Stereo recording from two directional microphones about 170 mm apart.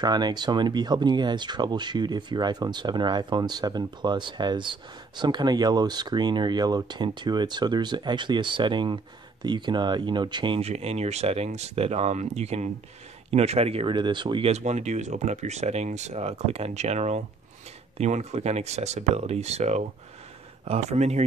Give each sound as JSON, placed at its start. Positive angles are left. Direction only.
{"t": 0.0, "sound": "speech", "side_deg": -25}